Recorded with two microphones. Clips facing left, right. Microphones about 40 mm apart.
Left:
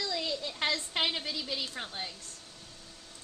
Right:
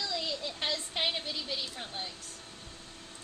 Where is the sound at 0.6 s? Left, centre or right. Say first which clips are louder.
Left 2 dB; left.